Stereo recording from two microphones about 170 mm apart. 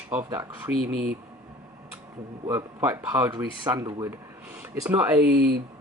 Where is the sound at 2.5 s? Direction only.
15° right (ahead or behind).